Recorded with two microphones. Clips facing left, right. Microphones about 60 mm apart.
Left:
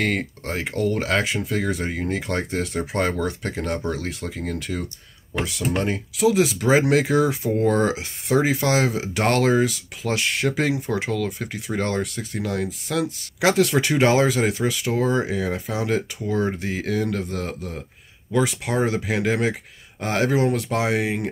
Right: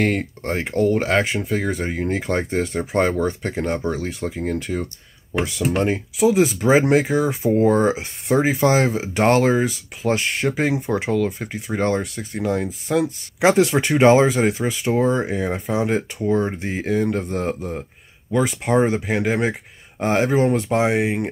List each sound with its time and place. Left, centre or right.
0.0 s speech: centre
2.7 s speech: centre
3.0 s speech: centre
7.8 s speech: right
9.2 s speech: centre
9.5 s speech: centre
13.4 s speech: centre
16.9 s speech: centre
17.2 s speech: right
19.1 s speech: centre
20.4 s speech: centre
20.7 s speech: centre
21.0 s speech: centre